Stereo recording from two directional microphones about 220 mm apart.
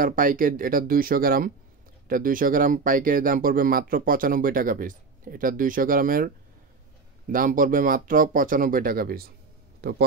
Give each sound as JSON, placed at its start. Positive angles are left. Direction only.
{"t": 0.0, "sound": "a man's voice", "side_deg": -40}